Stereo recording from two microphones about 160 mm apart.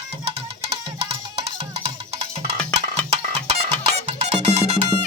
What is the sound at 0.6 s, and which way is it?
Music, 40° right (ahead or behind).